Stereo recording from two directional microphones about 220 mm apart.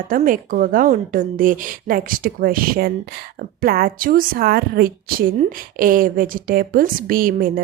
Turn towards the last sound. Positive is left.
turn(degrees=-40)  # may be behind; listen again after turning